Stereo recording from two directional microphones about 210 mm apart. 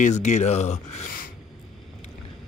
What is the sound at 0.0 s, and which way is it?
Speech, 35° left (ahead or behind).